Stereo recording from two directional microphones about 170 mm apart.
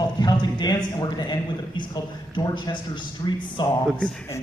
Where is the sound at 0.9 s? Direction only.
25° left (ahead or behind).